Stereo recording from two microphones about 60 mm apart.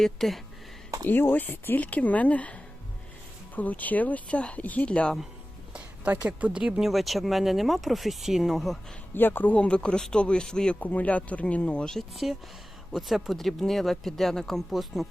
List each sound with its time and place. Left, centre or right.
0.0 s speech: centre
1.0 s speech: left
4.9 s speech: centre
5.7 s a woman's voice: right
6.7 s speech: centre
9.1 s speech: left
9.6 s speech: centre
10.8 s speech: left; by 15.0 s centre